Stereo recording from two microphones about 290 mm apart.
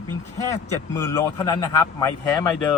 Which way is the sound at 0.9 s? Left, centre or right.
Centre.